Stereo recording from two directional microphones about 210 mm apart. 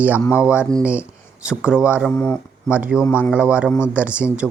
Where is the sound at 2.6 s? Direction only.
5° right (ahead or behind).